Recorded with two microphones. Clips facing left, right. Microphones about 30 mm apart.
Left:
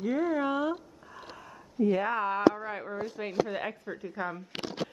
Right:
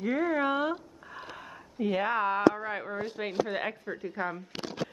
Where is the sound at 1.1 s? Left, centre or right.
Right.